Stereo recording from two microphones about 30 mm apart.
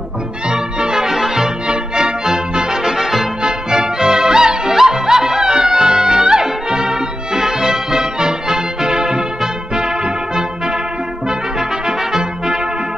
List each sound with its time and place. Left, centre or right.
0.5 s music: right
1.7 s music: right
3.4 s music: right